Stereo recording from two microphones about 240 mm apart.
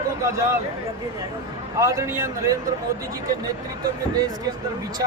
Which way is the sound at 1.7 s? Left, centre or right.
Centre.